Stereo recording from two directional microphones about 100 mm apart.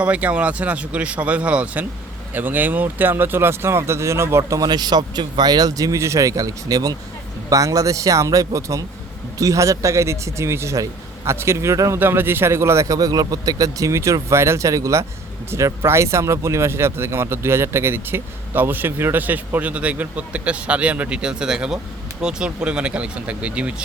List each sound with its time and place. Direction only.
0.0 s a man's voice: 15° right (ahead or behind)